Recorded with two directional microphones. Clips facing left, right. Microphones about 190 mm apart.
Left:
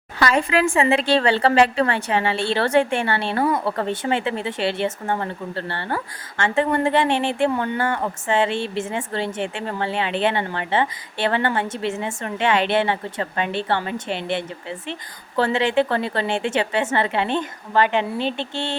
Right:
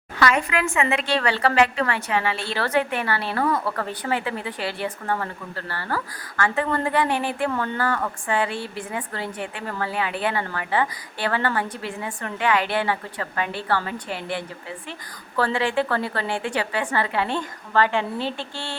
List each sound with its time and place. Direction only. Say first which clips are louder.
0.2 s speech: left 3 dB; 30° left (ahead or behind)